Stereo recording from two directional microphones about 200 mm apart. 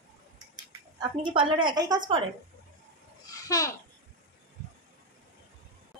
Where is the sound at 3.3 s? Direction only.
15° left (ahead or behind).